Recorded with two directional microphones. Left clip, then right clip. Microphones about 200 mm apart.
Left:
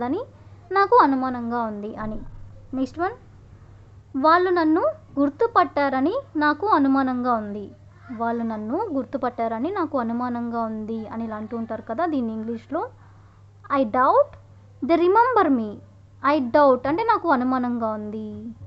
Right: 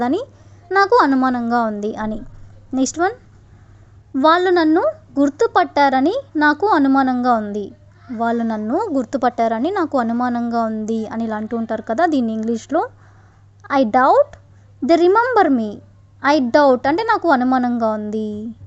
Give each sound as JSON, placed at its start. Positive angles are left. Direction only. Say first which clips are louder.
{"t": 0.0, "sound": "a woman's voice", "louder": "right 7 dB", "side_deg": -30}